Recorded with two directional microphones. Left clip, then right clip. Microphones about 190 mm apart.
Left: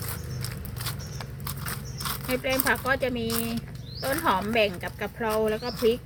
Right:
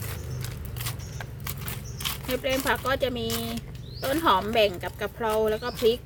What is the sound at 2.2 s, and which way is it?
Speech, 20° right (ahead or behind).